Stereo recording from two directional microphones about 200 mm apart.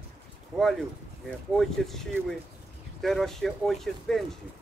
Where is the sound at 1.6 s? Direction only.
Centre (ahead or behind).